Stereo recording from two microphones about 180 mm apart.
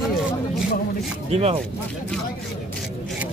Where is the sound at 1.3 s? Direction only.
35° right (ahead or behind).